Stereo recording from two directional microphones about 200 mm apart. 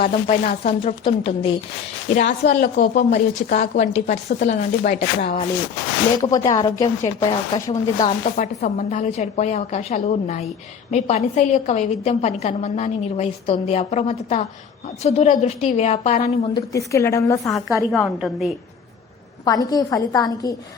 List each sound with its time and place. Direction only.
0.0 s a woman's voice: 35° left (ahead or behind)
6.2 s speech: 20° left (ahead or behind)
8.2 s a woman's voice: 35° left (ahead or behind)
16.6 s a woman's voice: 15° left (ahead or behind)
17.9 s a woman's voice: centre (ahead or behind)
19.5 s speech: 20° left (ahead or behind)